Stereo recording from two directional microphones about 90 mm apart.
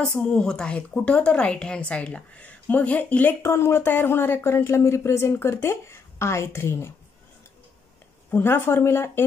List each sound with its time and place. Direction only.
0.0 s a woman's voice: 10° left (ahead or behind)
3.4 s speech: 30° left (ahead or behind)
8.3 s speech: 25° left (ahead or behind)